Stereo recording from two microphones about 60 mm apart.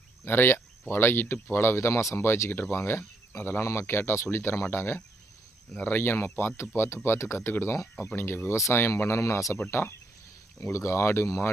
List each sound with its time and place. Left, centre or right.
0.3 s speech: left
3.6 s speech: left